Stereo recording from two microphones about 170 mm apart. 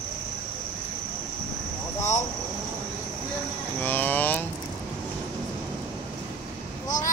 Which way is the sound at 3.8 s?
10° left (ahead or behind).